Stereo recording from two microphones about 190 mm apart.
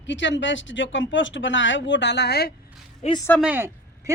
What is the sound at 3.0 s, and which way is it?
Speech, 35° left (ahead or behind).